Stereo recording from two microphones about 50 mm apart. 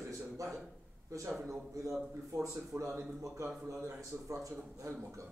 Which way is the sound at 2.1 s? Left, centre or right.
Right.